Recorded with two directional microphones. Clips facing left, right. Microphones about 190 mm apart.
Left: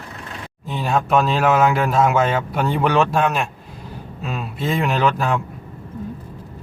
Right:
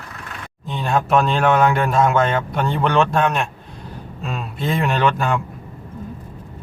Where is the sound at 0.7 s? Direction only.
5° left (ahead or behind).